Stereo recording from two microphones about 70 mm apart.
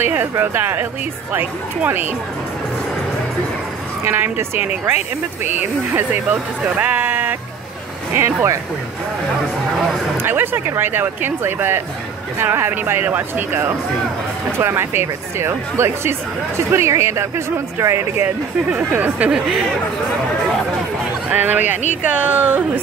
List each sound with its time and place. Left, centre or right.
0.0 s speech: right
4.0 s speech: right
10.2 s speech: right
18.7 s speech: centre
21.3 s speech: right